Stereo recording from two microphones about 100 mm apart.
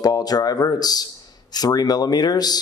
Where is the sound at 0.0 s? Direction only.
40° left (ahead or behind).